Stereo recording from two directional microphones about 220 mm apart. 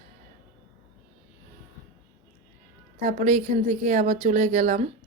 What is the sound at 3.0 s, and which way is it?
Speech, 35° right (ahead or behind).